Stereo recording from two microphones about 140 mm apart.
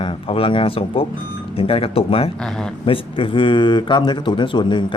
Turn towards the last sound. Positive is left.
turn(degrees=35)  # may be behind; listen again after turning